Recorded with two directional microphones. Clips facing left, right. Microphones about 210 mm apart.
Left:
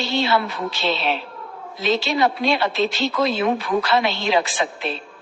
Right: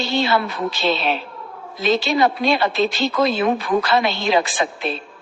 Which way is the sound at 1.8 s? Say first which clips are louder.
Right 2 dB; 45° right (ahead or behind).